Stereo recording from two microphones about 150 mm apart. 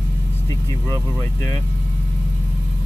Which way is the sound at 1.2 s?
20° left (ahead or behind).